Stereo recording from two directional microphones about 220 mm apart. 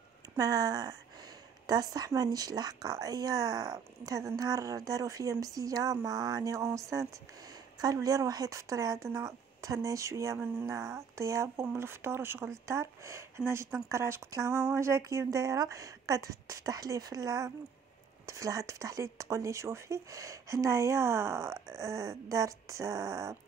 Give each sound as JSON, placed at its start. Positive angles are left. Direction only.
{"t": 0.4, "sound": "speech", "side_deg": -15}